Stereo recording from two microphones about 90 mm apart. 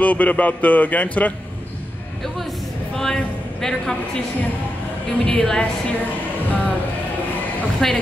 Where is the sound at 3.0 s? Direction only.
5° left (ahead or behind).